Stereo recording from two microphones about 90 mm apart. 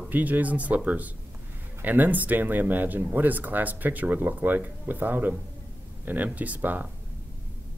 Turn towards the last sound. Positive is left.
turn(degrees=-20)  # may be behind; listen again after turning